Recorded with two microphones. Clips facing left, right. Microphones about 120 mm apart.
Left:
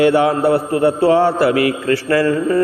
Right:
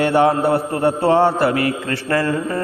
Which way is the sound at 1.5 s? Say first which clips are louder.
Left 4 dB; 35° right (ahead or behind).